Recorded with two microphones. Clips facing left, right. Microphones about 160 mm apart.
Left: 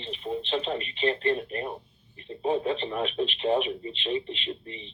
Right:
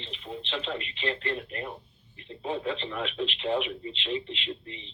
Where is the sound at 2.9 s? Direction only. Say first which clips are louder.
Left 4 dB; 40° left (ahead or behind).